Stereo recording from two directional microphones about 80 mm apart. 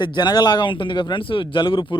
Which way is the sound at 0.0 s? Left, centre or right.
Left.